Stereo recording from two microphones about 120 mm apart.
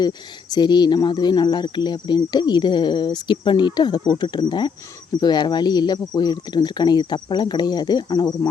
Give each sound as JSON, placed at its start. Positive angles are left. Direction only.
{"t": 0.5, "sound": "speech", "side_deg": 35}